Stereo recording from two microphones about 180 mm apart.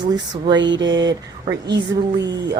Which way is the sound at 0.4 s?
25° right (ahead or behind).